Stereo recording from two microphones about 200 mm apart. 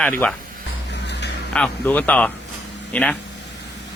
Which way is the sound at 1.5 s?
5° left (ahead or behind).